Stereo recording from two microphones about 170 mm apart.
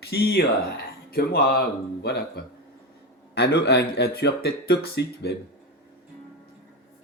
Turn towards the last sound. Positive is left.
turn(degrees=80)